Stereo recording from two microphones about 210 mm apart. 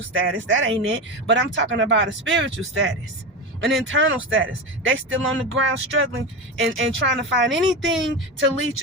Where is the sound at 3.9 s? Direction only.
65° right (ahead or behind).